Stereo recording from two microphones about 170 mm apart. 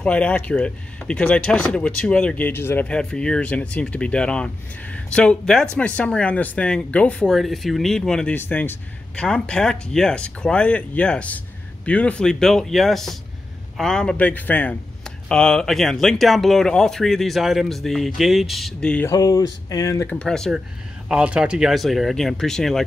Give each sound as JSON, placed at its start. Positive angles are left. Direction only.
{"t": 0.0, "sound": "speech", "side_deg": 5}
{"t": 19.0, "sound": "speech", "side_deg": 20}
{"t": 20.1, "sound": "speech", "side_deg": 5}